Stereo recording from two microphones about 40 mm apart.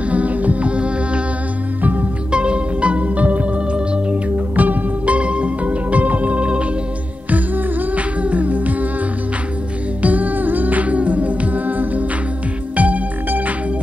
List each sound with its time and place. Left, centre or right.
0.1 s music: right
1.8 s music: right
2.3 s music: right
3.7 s music: right
4.6 s music: right
10.0 s music: right